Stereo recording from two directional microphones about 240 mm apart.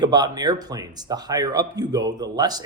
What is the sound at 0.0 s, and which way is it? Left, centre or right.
Speech, centre.